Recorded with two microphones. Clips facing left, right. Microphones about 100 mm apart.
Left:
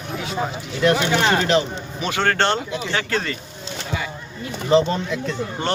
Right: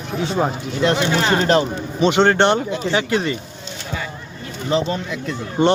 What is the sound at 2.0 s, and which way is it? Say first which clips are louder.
Speech: right 6 dB; 25° right (ahead or behind).